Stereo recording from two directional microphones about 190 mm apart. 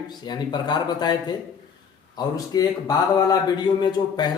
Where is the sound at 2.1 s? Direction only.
20° left (ahead or behind).